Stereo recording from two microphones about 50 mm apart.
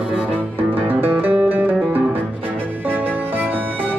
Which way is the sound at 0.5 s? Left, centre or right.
Right.